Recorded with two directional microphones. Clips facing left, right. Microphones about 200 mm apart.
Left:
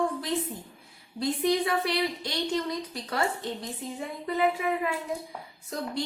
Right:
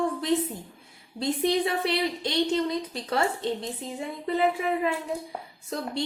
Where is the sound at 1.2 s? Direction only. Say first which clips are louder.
Right 1 dB; 25° right (ahead or behind).